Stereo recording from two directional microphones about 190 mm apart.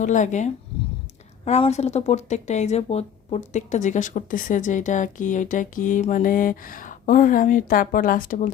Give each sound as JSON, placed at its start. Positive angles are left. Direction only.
{"t": 0.0, "sound": "speech", "side_deg": 40}